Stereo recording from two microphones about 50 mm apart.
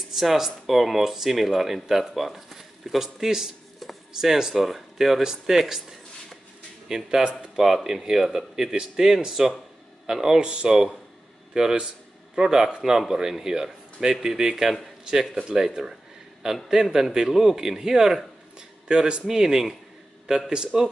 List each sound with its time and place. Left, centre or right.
0.1 s speech: centre
3.8 s a sound: centre
4.2 s a man's voice: centre
12.4 s a man's voice: centre